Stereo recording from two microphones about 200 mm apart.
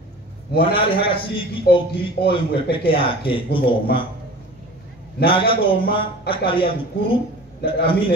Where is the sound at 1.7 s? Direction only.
50° left (ahead or behind).